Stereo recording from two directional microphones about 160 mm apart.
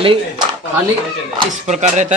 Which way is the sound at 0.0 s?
35° right (ahead or behind).